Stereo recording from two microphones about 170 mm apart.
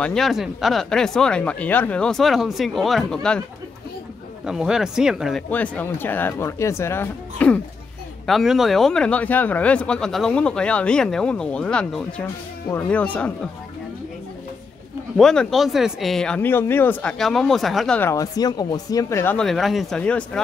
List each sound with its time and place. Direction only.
0.0 s speech: centre (ahead or behind)
4.5 s speech: 5° right (ahead or behind)
5.5 s speech: 10° left (ahead or behind)
8.3 s speech: centre (ahead or behind)
15.1 s speech: centre (ahead or behind)
18.1 s speech: 20° left (ahead or behind)
19.3 s speech: centre (ahead or behind)